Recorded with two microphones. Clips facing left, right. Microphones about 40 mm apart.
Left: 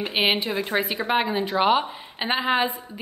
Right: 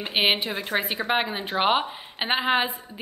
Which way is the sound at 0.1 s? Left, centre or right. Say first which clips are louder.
Right 1 dB; centre.